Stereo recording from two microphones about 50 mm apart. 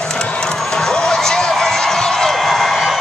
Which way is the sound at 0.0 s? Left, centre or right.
Centre.